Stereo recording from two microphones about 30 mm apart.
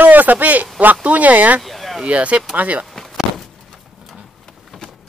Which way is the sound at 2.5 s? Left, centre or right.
Right.